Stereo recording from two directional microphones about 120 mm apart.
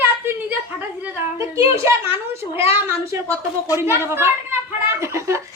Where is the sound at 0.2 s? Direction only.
15° right (ahead or behind).